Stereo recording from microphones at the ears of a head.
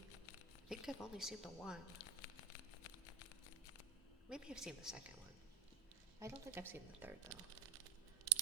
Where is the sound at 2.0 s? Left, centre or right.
Left.